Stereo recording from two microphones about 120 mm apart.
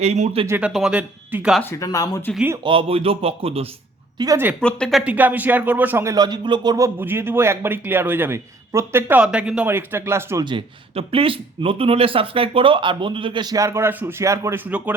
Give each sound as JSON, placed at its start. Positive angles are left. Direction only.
{"t": 0.0, "sound": "speech", "side_deg": -65}
{"t": 0.7, "sound": "speech", "side_deg": -5}
{"t": 1.7, "sound": "speech", "side_deg": 30}
{"t": 2.6, "sound": "speech", "side_deg": -50}
{"t": 4.2, "sound": "speech", "side_deg": -35}
{"t": 4.6, "sound": "speech", "side_deg": 5}
{"t": 5.0, "sound": "speech", "side_deg": -15}
{"t": 6.1, "sound": "speech", "side_deg": -35}
{"t": 9.6, "sound": "speech", "side_deg": -20}
{"t": 10.4, "sound": "speech", "side_deg": -45}